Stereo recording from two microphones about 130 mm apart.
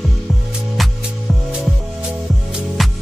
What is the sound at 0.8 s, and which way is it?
Music, centre (ahead or behind).